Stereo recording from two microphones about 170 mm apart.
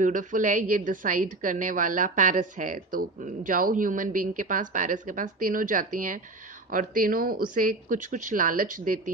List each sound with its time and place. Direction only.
0.0 s a woman's voice: 50° right (ahead or behind)